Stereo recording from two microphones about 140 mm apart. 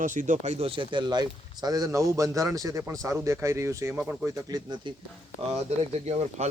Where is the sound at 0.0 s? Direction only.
65° right (ahead or behind); by 3.9 s 20° right (ahead or behind).